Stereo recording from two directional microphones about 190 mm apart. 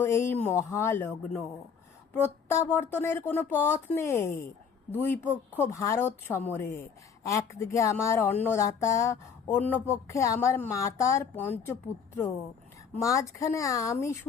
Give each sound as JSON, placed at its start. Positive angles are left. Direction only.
{"t": 0.0, "sound": "speech", "side_deg": 10}